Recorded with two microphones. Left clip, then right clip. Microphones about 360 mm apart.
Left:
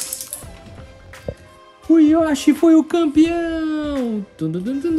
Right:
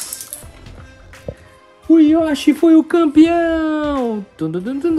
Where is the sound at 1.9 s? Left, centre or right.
Centre.